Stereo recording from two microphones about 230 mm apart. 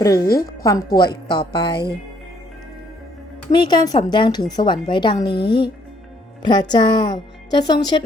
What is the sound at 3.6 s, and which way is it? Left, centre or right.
A woman's voice, centre.